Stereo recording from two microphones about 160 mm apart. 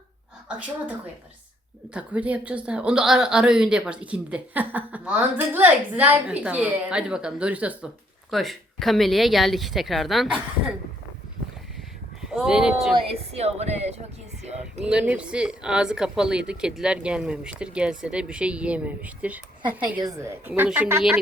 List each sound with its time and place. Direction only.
0.4 s speech: 5° right (ahead or behind)
12.3 s speech: centre (ahead or behind)
13.3 s speech: 40° right (ahead or behind)
14.8 s speech: 5° right (ahead or behind)
20.0 s speech: 20° right (ahead or behind)